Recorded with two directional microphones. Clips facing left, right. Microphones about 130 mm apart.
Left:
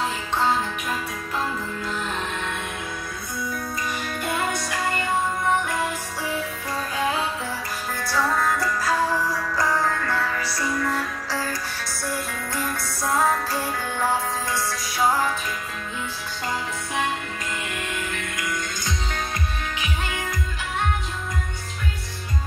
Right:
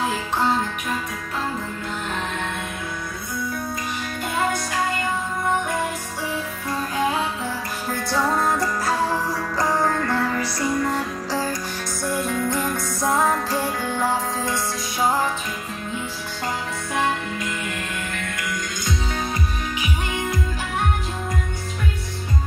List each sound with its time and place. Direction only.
8.0 s music: 20° right (ahead or behind)
19.8 s music: 20° right (ahead or behind)